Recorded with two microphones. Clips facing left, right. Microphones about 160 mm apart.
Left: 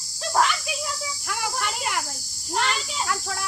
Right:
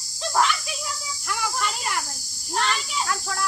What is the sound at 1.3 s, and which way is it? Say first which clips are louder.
Insect: right 2 dB; 10° left (ahead or behind).